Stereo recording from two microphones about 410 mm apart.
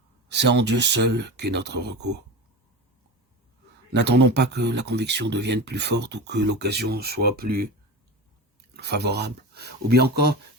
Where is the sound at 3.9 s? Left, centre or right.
Right.